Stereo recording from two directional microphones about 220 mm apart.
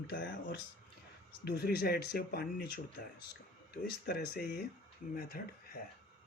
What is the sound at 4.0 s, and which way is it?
Speech, 45° left (ahead or behind).